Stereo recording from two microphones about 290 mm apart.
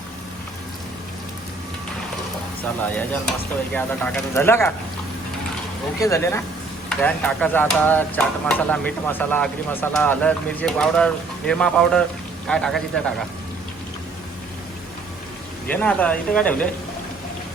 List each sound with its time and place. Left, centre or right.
2.8 s speech: centre
6.0 s speech: centre
15.7 s speech: centre